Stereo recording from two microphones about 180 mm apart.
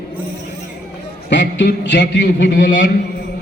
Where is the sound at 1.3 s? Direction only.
90° left.